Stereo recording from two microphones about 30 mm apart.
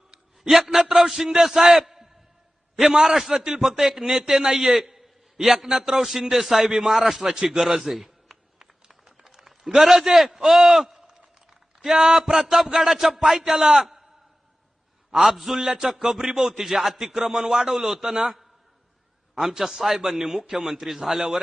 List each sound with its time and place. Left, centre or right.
0.5 s a man's voice: centre
2.9 s a man's voice: centre
4.0 s a man's voice: right
4.7 s a sound: centre
5.4 s a man's voice: centre
9.1 s a sound: centre
9.8 s a man's voice: centre
13.7 s a man's voice: centre
15.1 s a man's voice: centre
19.5 s a man's voice: centre
20.7 s a man's voice: centre